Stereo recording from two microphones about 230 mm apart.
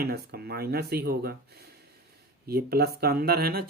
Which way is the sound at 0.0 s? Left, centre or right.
Right.